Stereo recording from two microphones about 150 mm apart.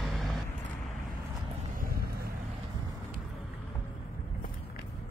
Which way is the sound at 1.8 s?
75° right (ahead or behind).